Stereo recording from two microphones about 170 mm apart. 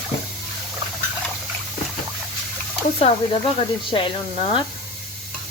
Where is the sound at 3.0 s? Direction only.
35° left (ahead or behind).